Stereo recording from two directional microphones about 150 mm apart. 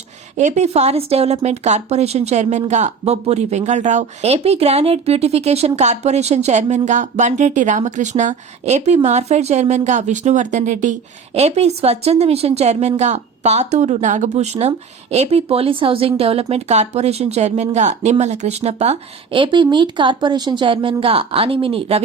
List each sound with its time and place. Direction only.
0.3 s speech: 50° right (ahead or behind)
19.4 s speech: 30° right (ahead or behind)